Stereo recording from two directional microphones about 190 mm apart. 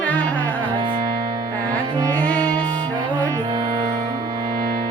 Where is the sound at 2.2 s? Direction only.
5° left (ahead or behind).